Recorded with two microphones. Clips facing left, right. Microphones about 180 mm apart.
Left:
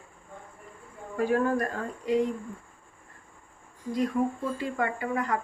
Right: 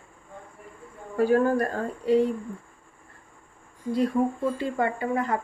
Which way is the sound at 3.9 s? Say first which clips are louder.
Right 3 dB; 30° right (ahead or behind).